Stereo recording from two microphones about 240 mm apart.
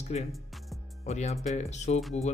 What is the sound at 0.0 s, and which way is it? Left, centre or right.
Speech, left.